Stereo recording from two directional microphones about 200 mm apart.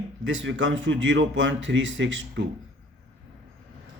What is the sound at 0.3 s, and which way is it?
A man's voice, 70° right (ahead or behind).